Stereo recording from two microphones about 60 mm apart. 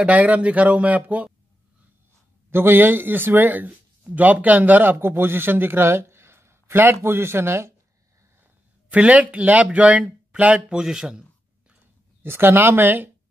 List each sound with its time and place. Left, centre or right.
0.0 s speech: right
2.5 s speech: right
4.9 s a man's voice: right
8.9 s speech: right
12.2 s speech: right